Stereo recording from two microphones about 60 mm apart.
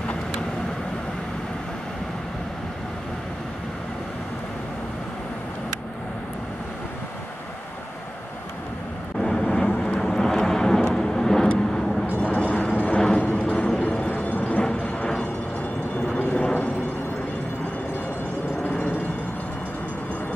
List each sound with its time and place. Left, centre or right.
9.2 s vehicle: centre
12.2 s vehicle: centre
12.7 s music: centre
13.8 s vehicle: centre
14.4 s music: centre
16.1 s a sound: centre